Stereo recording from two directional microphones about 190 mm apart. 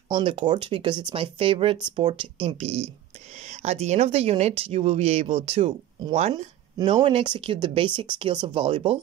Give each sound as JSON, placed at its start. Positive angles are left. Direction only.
{"t": 0.1, "sound": "speech", "side_deg": -25}